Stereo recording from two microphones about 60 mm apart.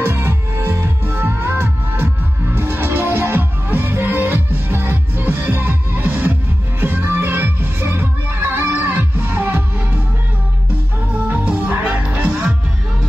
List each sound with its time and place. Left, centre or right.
0.0 s music: right
11.2 s music: right